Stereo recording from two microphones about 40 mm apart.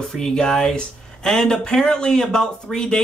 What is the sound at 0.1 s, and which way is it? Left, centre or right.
Speech, centre.